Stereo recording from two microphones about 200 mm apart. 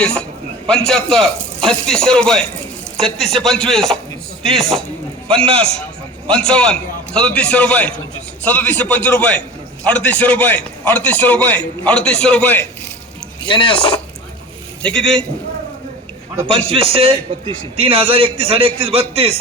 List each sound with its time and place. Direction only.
0.0 s a man's voice: 5° left (ahead or behind)
6.2 s a man's voice: 5° left (ahead or behind)
13.4 s speech: 25° left (ahead or behind)
14.8 s a man's voice: 5° left (ahead or behind)
16.5 s a man's voice: 30° right (ahead or behind)